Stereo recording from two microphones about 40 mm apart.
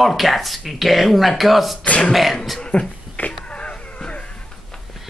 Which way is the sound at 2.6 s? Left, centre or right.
Left.